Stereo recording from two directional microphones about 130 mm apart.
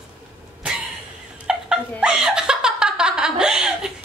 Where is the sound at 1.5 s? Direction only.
5° right (ahead or behind).